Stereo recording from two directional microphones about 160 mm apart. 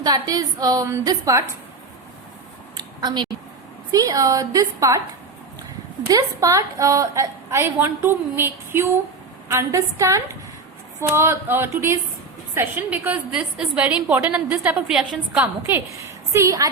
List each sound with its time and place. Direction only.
0.0 s a woman's voice: 20° right (ahead or behind)
2.7 s a sound: 25° right (ahead or behind)
3.9 s a woman's voice: 20° right (ahead or behind)
6.1 s a woman's voice: 20° right (ahead or behind); by 15.4 s 5° right (ahead or behind)
15.7 s a woman's voice: 15° right (ahead or behind)